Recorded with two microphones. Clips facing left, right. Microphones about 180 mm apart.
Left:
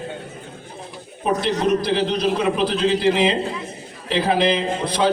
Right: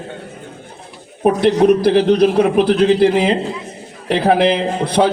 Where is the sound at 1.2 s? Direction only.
55° right (ahead or behind).